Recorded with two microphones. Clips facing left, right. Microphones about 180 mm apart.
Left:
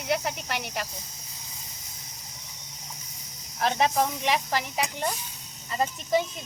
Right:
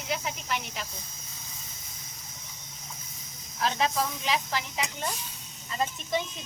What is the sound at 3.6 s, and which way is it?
Speech, 55° left (ahead or behind).